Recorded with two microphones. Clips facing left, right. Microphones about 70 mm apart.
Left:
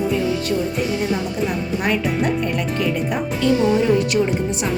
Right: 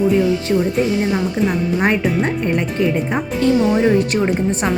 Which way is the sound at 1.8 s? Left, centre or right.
Right.